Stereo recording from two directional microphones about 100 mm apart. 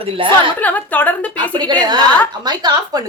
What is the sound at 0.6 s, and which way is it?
Speech, 15° left (ahead or behind).